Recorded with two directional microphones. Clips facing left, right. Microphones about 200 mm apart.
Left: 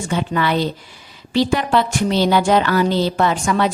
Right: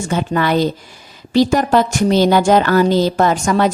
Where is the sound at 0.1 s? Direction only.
45° right (ahead or behind).